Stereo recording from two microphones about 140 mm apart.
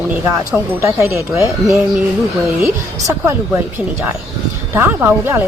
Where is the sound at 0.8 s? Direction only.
20° right (ahead or behind).